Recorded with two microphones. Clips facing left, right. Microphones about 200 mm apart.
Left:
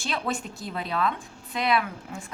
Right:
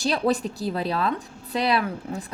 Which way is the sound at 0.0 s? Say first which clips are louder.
Right 8 dB; 35° right (ahead or behind).